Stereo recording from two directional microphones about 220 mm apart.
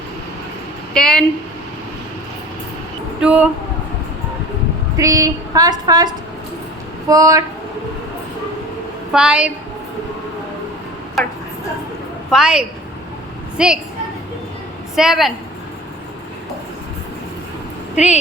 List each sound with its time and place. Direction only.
0.9 s a woman's voice: 5° left (ahead or behind)
3.2 s a woman's voice: 5° right (ahead or behind)
4.9 s a woman's voice: 15° right (ahead or behind)
7.1 s a woman's voice: 15° right (ahead or behind)
9.1 s a woman's voice: 5° right (ahead or behind)
11.2 s a woman's voice: centre (ahead or behind)
14.9 s a woman's voice: centre (ahead or behind)
17.9 s speech: 30° left (ahead or behind)